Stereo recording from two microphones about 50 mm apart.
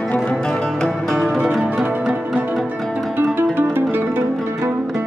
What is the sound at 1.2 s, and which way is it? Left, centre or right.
Music, right.